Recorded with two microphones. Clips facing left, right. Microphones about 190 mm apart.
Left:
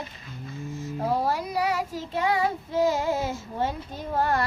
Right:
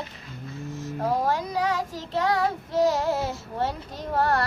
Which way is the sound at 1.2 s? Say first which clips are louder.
Right 1 dB; 10° left (ahead or behind).